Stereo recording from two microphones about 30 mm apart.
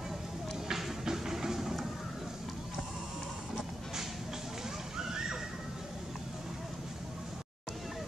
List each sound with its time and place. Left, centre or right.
0.7 s music: centre
4.9 s water: centre